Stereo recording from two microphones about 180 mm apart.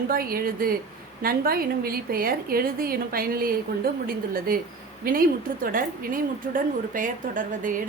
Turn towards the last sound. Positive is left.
turn(degrees=-50)  # may be behind; listen again after turning